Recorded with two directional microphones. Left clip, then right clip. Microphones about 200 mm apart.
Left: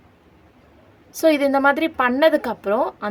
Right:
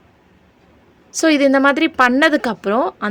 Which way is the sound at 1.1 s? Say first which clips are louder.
Right 3 dB; 35° right (ahead or behind).